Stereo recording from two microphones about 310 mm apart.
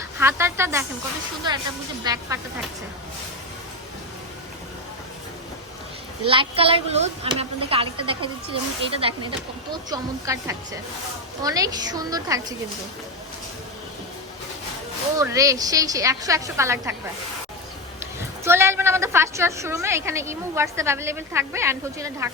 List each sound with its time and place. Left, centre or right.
0.2 s a woman's voice: centre
2.0 s a woman's voice: centre
6.2 s a woman's voice: centre
15.2 s a woman's voice: centre
18.4 s a woman's voice: centre